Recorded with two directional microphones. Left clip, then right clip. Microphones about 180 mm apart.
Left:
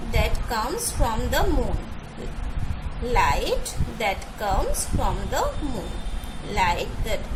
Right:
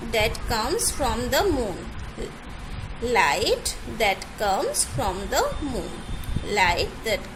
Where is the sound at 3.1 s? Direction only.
15° right (ahead or behind).